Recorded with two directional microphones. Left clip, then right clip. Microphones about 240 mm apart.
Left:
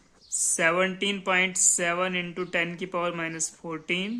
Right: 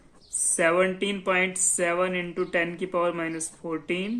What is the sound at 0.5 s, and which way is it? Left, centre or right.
Speech, left.